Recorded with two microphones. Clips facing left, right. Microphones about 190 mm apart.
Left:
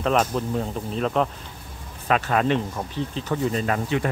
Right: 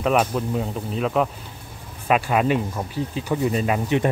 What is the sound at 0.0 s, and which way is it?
Speech, 5° right (ahead or behind).